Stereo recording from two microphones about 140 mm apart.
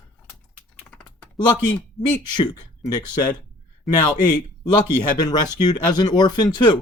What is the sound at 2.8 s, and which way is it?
Speech, 30° left (ahead or behind).